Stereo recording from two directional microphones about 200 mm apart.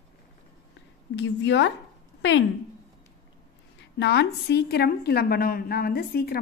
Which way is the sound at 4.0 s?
55° left (ahead or behind).